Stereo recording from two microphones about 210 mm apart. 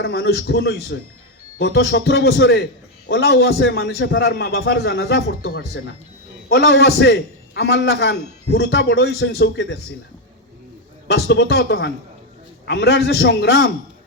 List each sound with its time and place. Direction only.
0.0 s a man's voice: 55° left (ahead or behind)
11.1 s a man's voice: 55° left (ahead or behind)